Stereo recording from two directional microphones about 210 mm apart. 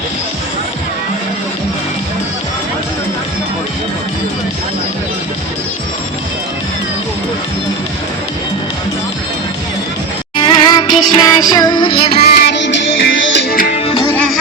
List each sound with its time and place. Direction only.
10.3 s music: 20° left (ahead or behind)
12.4 s music: 55° left (ahead or behind)